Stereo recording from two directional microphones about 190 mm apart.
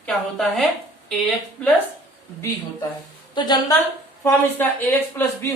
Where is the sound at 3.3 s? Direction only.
20° left (ahead or behind).